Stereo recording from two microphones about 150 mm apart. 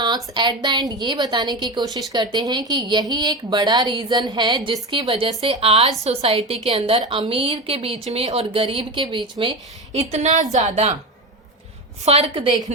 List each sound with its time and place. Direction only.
0.0 s a woman's voice: 30° right (ahead or behind); by 10.9 s 50° right (ahead or behind)
12.0 s a woman's voice: 40° right (ahead or behind)